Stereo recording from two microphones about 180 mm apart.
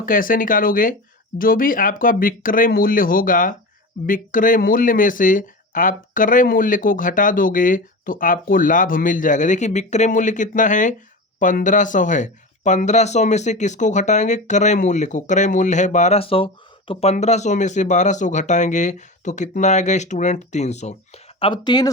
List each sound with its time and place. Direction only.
0.0 s speech: 50° left (ahead or behind)
21.3 s speech: 30° left (ahead or behind)